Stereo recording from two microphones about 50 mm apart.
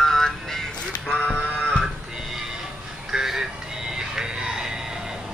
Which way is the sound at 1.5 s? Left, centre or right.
Centre.